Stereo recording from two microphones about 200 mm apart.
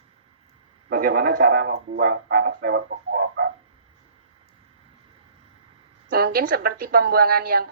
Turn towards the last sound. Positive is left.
turn(degrees=-50)  # may be behind; listen again after turning